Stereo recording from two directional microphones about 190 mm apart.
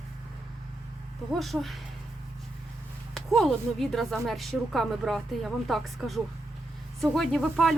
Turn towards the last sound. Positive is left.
turn(degrees=0)  # may be behind; listen again after turning